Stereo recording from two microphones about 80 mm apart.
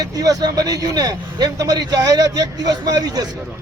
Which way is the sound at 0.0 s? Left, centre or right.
Right.